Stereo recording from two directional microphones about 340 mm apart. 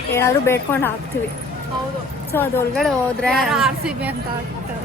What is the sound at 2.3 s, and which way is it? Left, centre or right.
A woman's voice, centre.